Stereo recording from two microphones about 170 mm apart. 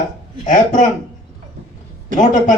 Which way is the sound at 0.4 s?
45° left (ahead or behind).